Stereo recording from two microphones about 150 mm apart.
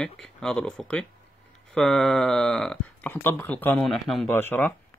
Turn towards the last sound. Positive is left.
turn(degrees=10)  # may be behind; listen again after turning